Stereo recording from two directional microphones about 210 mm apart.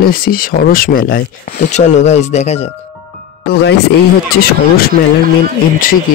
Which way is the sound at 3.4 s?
50° left (ahead or behind).